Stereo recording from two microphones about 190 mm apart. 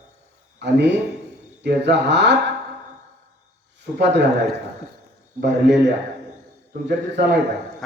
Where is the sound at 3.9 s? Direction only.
65° right (ahead or behind).